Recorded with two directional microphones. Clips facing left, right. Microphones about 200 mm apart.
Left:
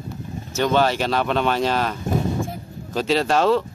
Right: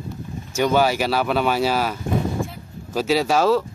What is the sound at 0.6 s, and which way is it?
Speech, 10° right (ahead or behind).